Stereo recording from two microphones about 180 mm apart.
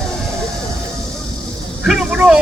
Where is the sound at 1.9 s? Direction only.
5° right (ahead or behind).